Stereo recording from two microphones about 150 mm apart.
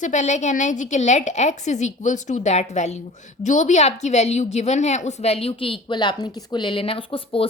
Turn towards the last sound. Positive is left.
turn(degrees=35)  # may be behind; listen again after turning